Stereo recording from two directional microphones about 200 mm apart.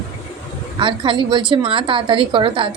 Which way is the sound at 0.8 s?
25° right (ahead or behind).